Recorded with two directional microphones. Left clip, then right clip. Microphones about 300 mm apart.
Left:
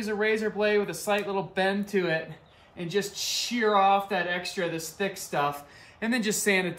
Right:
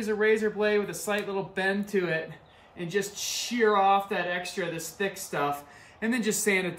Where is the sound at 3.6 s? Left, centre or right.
Centre.